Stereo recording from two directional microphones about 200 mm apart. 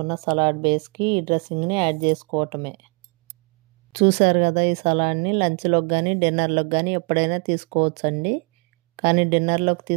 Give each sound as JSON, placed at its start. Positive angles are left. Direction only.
{"t": 0.0, "sound": "speech", "side_deg": -20}
{"t": 3.9, "sound": "speech", "side_deg": -30}